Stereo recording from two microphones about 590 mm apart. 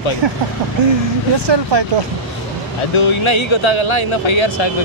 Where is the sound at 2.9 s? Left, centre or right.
Left.